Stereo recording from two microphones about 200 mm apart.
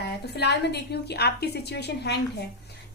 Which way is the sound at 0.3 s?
55° left (ahead or behind).